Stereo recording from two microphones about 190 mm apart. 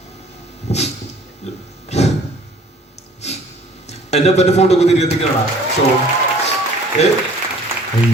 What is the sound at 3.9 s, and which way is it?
A man's voice, 35° left (ahead or behind).